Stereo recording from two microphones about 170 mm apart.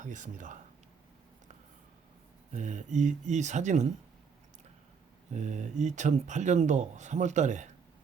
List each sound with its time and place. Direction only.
0.0 s speech: 45° right (ahead or behind)
2.5 s speech: 45° right (ahead or behind)
5.3 s speech: 45° right (ahead or behind)